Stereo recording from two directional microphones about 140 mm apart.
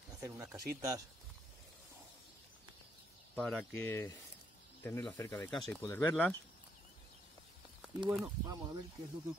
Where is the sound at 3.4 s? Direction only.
10° left (ahead or behind).